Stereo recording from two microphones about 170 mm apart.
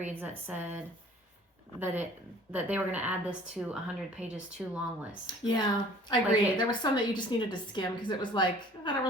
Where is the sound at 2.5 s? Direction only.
10° right (ahead or behind).